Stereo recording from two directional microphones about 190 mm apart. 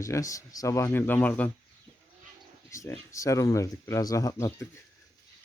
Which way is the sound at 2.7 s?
15° left (ahead or behind).